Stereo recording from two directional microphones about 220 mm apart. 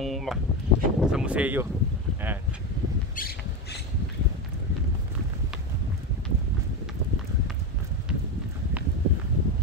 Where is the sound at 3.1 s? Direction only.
45° left (ahead or behind).